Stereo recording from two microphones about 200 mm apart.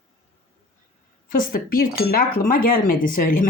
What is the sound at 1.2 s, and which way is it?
Cutlery, 45° left (ahead or behind).